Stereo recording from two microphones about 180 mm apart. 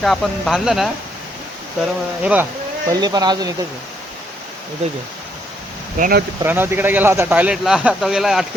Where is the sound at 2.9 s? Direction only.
25° right (ahead or behind).